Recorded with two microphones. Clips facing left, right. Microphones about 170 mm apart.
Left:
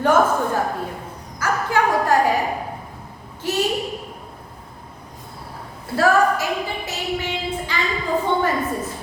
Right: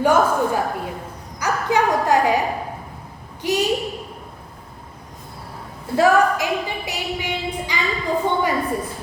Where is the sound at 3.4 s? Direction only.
15° right (ahead or behind).